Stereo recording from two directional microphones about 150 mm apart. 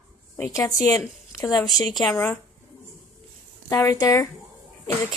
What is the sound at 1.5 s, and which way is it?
Speech, centre (ahead or behind).